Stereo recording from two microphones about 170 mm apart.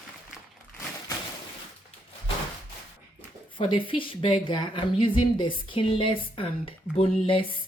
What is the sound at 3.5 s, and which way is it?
Speech, 30° left (ahead or behind).